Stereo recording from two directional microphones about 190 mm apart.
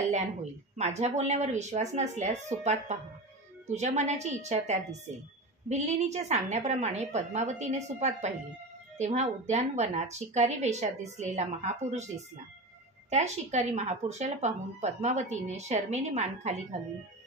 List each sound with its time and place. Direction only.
0.1 s speech: 40° right (ahead or behind)
13.1 s speech: 35° right (ahead or behind)